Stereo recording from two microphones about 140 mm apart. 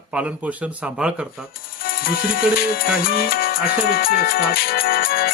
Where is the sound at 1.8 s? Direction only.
90° left.